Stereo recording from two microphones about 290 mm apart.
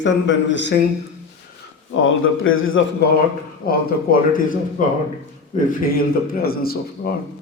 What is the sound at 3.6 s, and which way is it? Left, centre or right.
A man's voice, left.